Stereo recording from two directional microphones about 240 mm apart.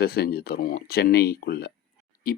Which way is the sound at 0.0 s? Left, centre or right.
Left.